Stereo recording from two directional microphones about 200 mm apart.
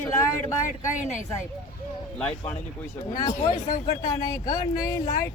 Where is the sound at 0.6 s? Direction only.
40° left (ahead or behind).